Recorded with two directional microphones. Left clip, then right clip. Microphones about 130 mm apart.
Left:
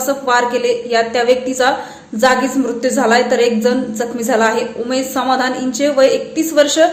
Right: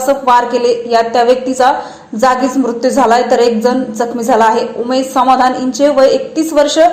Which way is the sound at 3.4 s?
20° left (ahead or behind).